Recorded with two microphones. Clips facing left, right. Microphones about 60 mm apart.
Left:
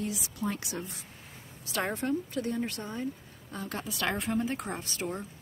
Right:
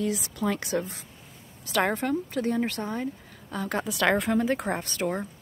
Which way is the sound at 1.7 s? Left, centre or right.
Right.